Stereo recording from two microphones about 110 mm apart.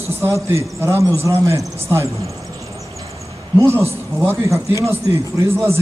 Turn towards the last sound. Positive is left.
turn(degrees=-25)  # may be behind; listen again after turning